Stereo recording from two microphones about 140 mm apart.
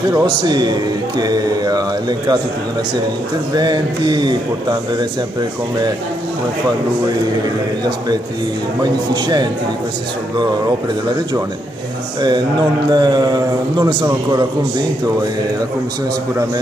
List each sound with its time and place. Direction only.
0.1 s a man's voice: 30° right (ahead or behind)
3.5 s speech: 30° right (ahead or behind)
9.1 s speech: 30° right (ahead or behind)
12.9 s a man's voice: 30° right (ahead or behind)